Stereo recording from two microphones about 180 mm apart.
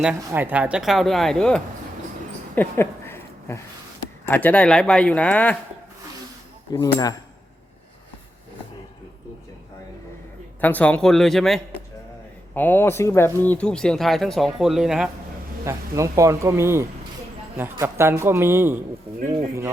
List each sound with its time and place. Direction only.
0.3 s speech: 10° right (ahead or behind)
2.6 s a sound: 15° left (ahead or behind)
4.3 s speech: 10° left (ahead or behind)
6.7 s speech: 20° left (ahead or behind)
10.6 s speech: 10° left (ahead or behind)
15.6 s speech: 15° right (ahead or behind)